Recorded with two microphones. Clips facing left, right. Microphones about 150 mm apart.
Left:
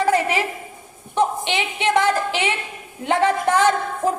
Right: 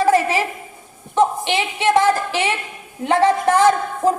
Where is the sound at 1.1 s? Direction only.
20° left (ahead or behind).